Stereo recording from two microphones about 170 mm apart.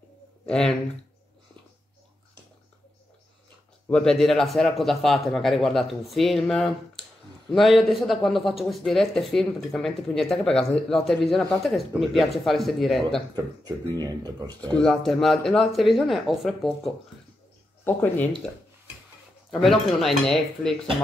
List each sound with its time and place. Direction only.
0.5 s speech: 5° left (ahead or behind)
3.9 s speech: 5° left (ahead or behind)
13.9 s speech: 25° right (ahead or behind)
14.8 s speech: centre (ahead or behind)
19.6 s speech: centre (ahead or behind)